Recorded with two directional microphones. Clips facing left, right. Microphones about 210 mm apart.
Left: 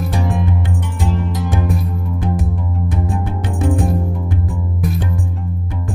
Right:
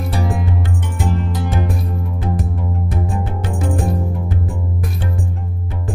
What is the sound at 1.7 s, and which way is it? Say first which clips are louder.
Music: left 2 dB; centre (ahead or behind).